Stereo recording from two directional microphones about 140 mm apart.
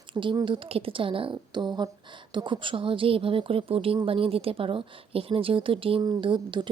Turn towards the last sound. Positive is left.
turn(degrees=-35)  # may be behind; listen again after turning